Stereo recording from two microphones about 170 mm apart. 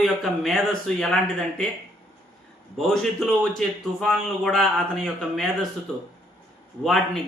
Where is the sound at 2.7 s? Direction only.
Centre (ahead or behind).